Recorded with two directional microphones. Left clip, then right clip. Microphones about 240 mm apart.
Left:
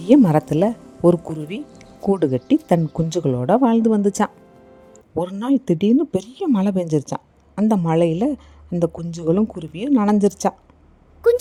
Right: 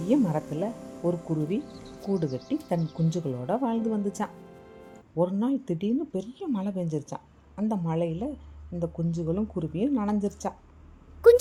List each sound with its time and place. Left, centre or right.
0.1 s speech: left
11.2 s speech: centre